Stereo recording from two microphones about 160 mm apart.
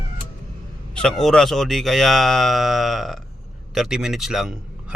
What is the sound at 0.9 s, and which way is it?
Speech, 5° left (ahead or behind).